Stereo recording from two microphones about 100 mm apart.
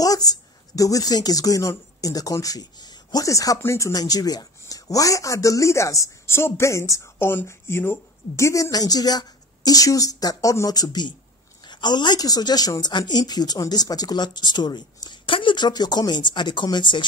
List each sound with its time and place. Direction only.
0.0 s speech: 40° left (ahead or behind)